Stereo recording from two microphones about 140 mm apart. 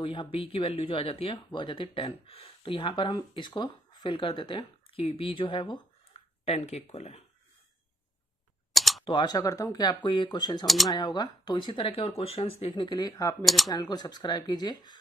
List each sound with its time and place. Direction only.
0.0 s speech: 35° left (ahead or behind)
6.4 s speech: 45° left (ahead or behind)
8.7 s camera: centre (ahead or behind)
9.0 s speech: 35° left (ahead or behind)